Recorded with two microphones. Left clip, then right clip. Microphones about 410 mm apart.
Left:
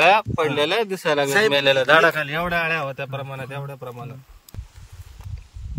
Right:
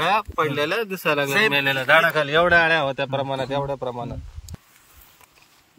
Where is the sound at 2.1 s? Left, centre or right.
Centre.